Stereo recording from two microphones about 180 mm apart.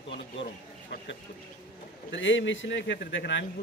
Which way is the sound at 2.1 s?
90° left.